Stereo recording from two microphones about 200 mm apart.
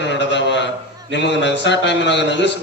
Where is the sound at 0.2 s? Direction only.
65° left (ahead or behind).